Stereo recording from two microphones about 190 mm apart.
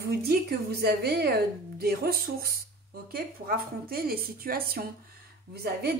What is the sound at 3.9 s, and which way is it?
Speech, 50° right (ahead or behind).